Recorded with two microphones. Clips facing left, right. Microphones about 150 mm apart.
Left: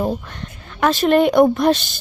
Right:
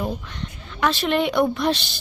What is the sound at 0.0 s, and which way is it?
A woman's voice, 45° left (ahead or behind).